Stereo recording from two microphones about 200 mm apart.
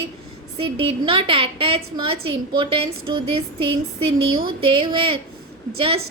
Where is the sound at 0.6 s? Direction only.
25° right (ahead or behind).